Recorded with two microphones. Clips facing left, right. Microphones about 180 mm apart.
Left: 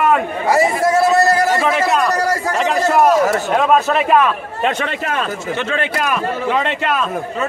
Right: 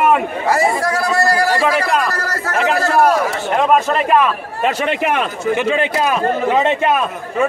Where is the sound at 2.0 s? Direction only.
15° left (ahead or behind).